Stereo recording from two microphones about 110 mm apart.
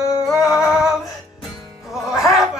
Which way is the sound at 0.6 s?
5° right (ahead or behind).